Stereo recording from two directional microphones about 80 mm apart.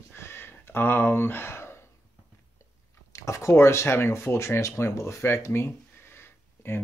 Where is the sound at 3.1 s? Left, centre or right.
Left.